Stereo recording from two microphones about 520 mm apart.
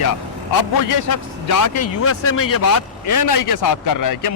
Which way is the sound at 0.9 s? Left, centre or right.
Left.